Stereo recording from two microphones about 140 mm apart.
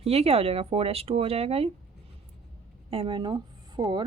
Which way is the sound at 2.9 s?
40° right (ahead or behind).